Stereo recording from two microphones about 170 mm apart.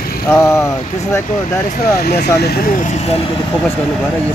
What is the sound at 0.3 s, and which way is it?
Speech, 15° left (ahead or behind).